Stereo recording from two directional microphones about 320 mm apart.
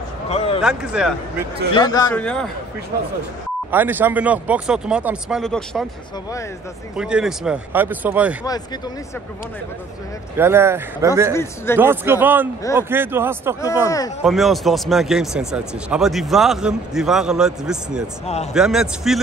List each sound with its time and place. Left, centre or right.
0.6 s speech: centre
1.7 s speech: centre
3.7 s speech: centre
7.0 s speech: centre
10.3 s speech: centre
11.3 s speech: centre
11.8 s speech: centre
13.8 s speech: centre
14.2 s speech: centre
18.2 s a man's voice: centre
18.5 s speech: centre